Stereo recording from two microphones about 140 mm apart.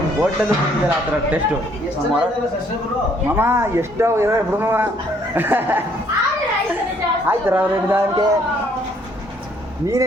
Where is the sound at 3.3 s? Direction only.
15° right (ahead or behind).